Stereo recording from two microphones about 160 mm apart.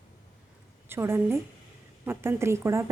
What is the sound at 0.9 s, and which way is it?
Speech, 15° right (ahead or behind).